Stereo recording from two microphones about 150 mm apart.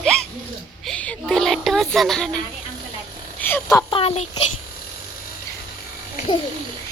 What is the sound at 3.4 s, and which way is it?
Speech, 15° left (ahead or behind).